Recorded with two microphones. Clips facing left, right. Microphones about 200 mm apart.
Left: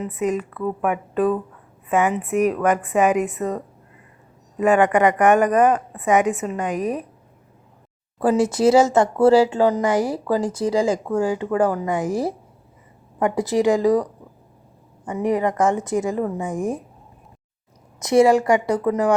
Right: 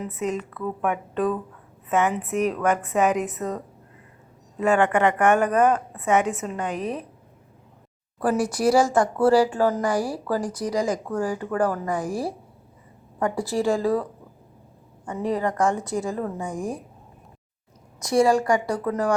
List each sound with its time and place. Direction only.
0.2 s speech: 10° left (ahead or behind)
2.1 s a woman's voice: centre (ahead or behind)
2.4 s speech: 10° left (ahead or behind)
8.2 s speech: 25° left (ahead or behind)
18.0 s speech: 20° left (ahead or behind)